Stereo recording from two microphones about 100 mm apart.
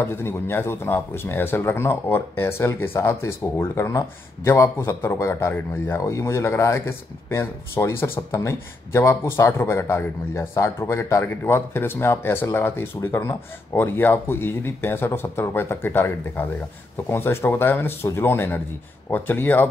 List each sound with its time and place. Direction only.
0.0 s speech: 25° left (ahead or behind)